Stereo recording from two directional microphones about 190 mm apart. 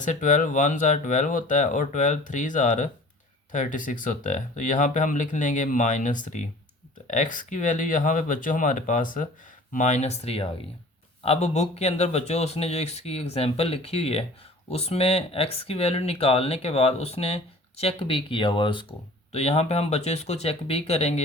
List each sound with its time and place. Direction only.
0.0 s speech: 40° left (ahead or behind)